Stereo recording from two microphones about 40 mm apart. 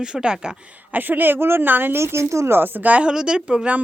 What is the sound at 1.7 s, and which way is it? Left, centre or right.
Speech, right.